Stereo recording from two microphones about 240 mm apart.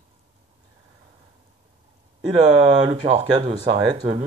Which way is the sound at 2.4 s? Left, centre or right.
Centre.